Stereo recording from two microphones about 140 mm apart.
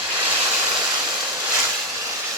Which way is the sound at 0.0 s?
15° right (ahead or behind).